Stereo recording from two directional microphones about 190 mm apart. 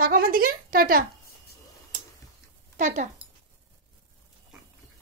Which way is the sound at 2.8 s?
40° right (ahead or behind).